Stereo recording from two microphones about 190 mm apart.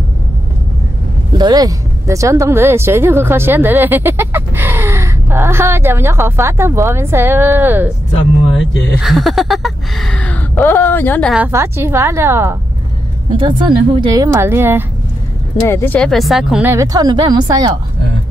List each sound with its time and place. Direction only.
1.4 s a woman's voice: 20° right (ahead or behind)
9.0 s speech: centre (ahead or behind)
11.3 s a woman's voice: 10° right (ahead or behind)
13.4 s a woman's voice: 25° right (ahead or behind)
15.6 s a woman's voice: 10° left (ahead or behind); by 17.7 s 20° right (ahead or behind)